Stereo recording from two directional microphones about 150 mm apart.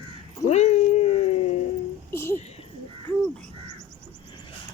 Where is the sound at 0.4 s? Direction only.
50° left (ahead or behind).